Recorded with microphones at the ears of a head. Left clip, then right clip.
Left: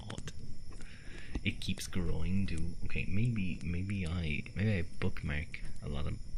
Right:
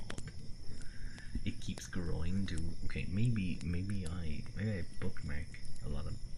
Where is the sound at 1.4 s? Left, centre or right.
Left.